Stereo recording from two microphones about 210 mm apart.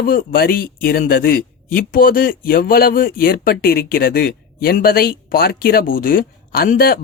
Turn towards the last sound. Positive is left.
turn(degrees=45)  # may be behind; listen again after turning